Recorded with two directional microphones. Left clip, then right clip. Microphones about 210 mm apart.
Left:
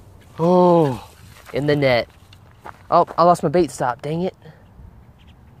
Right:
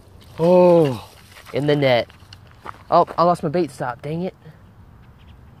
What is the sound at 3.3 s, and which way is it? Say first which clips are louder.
Speech: left 3 dB; 25° left (ahead or behind).